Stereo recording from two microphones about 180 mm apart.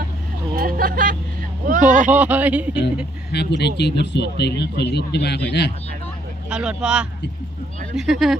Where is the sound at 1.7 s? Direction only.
45° right (ahead or behind).